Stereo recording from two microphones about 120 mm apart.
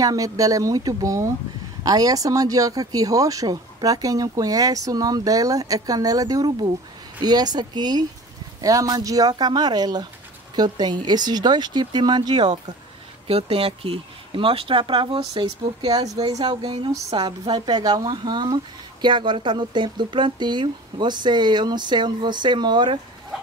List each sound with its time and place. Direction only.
0.0 s speech: 30° right (ahead or behind)
13.3 s speech: 55° right (ahead or behind)
15.8 s speech: 35° right (ahead or behind)